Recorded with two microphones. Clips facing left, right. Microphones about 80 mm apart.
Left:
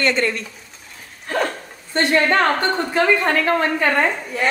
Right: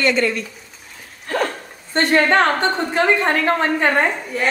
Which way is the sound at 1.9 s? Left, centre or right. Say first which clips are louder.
Right 2 dB; right.